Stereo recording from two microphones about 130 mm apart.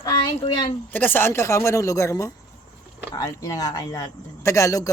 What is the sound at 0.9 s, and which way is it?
A man's voice, 15° left (ahead or behind).